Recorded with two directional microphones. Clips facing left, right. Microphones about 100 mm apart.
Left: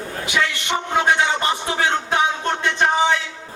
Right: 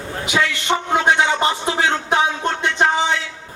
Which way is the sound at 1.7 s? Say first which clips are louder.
Right 2 dB; 20° right (ahead or behind).